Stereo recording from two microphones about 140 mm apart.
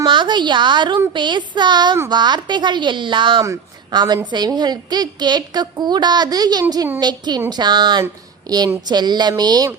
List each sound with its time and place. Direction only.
0.0 s a woman's voice: 35° right (ahead or behind)
3.4 s a woman's voice: 25° right (ahead or behind)